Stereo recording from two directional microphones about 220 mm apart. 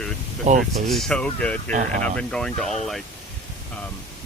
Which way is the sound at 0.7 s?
Centre (ahead or behind).